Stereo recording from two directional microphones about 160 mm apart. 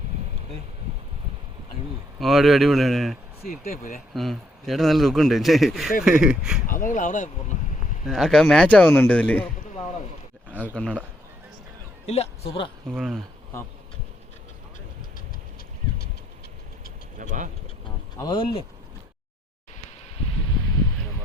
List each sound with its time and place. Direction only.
2.1 s a man's voice: centre (ahead or behind)
3.6 s speech: 65° left (ahead or behind)
4.1 s a man's voice: centre (ahead or behind)
6.7 s speech: 55° left (ahead or behind)
8.0 s speech: centre (ahead or behind)
12.0 s speech: 40° left (ahead or behind)
13.0 s a man's voice: centre (ahead or behind)
17.2 s speech: 55° right (ahead or behind)
18.2 s speech: 30° left (ahead or behind)